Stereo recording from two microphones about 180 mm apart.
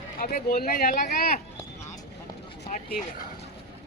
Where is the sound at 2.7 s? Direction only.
45° left (ahead or behind).